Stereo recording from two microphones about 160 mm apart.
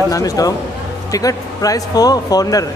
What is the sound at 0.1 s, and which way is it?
Speech, 20° left (ahead or behind).